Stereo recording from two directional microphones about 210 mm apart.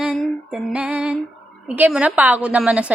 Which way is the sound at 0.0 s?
Centre (ahead or behind).